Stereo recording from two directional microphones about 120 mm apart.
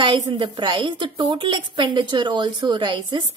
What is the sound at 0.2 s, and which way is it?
A woman's voice, 35° right (ahead or behind).